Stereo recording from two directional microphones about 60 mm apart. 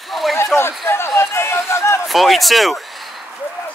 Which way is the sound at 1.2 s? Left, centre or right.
Left.